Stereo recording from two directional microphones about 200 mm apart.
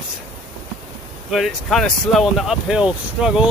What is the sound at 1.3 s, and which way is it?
Speech, centre (ahead or behind).